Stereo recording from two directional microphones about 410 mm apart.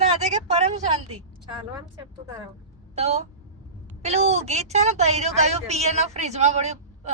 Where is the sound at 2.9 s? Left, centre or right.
Centre.